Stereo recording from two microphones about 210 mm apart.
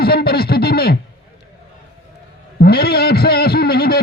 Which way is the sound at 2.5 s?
45° left (ahead or behind).